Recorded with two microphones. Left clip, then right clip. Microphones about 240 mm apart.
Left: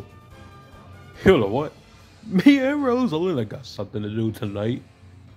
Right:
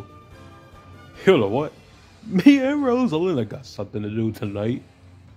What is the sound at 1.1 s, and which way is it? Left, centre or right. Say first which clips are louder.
Speech: even; centre.